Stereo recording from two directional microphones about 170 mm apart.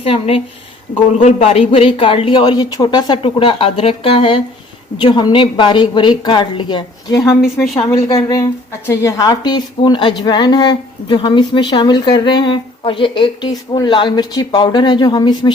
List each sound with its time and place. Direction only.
0.0 s a woman's voice: 35° left (ahead or behind)
7.4 s a woman's voice: centre (ahead or behind)
8.9 s a woman's voice: 15° left (ahead or behind)